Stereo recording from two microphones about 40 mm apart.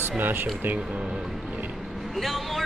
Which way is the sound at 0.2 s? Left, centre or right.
Right.